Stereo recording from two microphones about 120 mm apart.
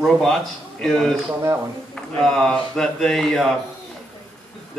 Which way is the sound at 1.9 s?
5° left (ahead or behind).